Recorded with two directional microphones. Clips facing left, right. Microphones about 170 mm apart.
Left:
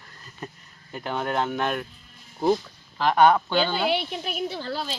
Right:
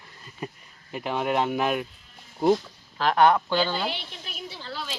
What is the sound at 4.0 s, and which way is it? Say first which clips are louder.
Speech: left 11 dB; 60° left (ahead or behind).